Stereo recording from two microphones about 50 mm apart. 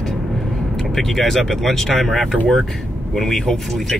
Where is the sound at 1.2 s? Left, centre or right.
Centre.